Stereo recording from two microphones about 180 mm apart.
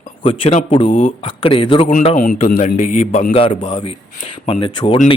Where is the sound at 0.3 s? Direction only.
35° left (ahead or behind).